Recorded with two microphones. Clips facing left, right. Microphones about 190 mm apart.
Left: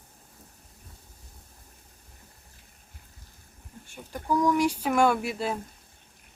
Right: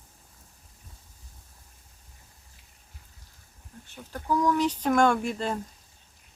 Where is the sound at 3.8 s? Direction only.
10° left (ahead or behind).